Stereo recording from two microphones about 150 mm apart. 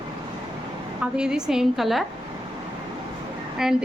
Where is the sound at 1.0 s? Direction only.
5° right (ahead or behind).